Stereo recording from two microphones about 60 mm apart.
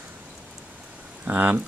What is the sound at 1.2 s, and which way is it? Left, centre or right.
Speech, right.